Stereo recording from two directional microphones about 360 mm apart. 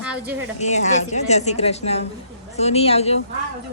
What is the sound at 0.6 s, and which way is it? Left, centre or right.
A woman's voice, centre.